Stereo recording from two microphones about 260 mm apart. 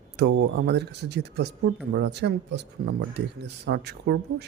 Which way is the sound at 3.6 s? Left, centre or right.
Right.